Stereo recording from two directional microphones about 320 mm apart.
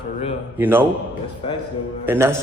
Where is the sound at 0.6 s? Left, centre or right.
Centre.